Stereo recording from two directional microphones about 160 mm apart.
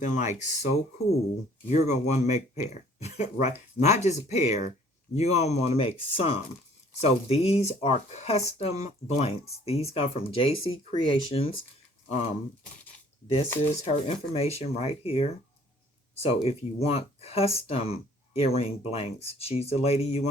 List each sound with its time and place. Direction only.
0.0 s speech: 50° left (ahead or behind)
1.7 s speech: 45° left (ahead or behind)
12.0 s speech: 45° left (ahead or behind)